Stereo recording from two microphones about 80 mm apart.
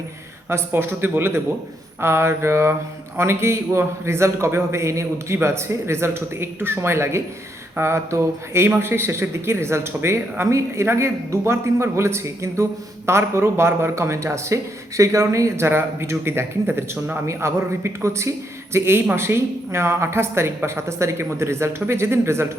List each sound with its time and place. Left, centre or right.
0.4 s a man's voice: right